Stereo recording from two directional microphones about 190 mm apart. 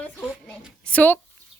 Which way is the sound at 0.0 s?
5° left (ahead or behind).